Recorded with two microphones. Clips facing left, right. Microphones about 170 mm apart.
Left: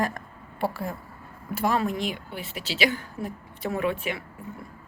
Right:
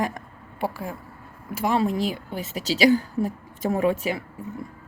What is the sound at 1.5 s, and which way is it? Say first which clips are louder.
Speech: right 1 dB; 15° right (ahead or behind).